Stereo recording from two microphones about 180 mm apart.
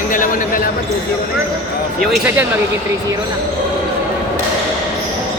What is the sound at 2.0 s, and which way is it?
Speech, 5° right (ahead or behind).